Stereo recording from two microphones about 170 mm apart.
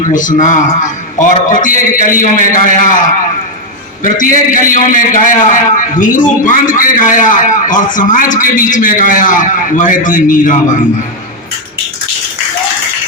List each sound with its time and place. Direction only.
0.1 s a man's voice: 50° left (ahead or behind)
4.0 s a man's voice: 50° left (ahead or behind)